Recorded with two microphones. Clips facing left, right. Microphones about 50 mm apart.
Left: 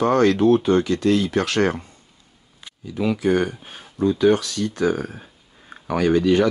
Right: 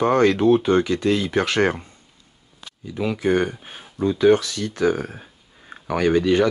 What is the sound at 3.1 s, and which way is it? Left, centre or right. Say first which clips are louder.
Speech: right 2 dB; centre.